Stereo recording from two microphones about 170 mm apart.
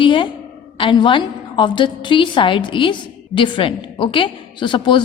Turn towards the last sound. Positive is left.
turn(degrees=30)  # may be behind; listen again after turning